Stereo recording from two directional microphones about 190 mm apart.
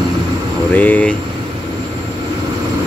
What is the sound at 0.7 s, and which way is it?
Speech, 10° left (ahead or behind).